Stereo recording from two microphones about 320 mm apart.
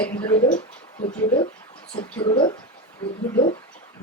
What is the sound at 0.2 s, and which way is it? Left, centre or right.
Speech, centre.